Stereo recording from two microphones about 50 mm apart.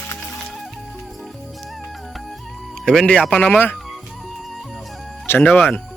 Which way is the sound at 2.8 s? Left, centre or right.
Centre.